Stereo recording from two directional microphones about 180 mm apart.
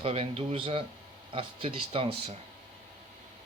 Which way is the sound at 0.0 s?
35° right (ahead or behind).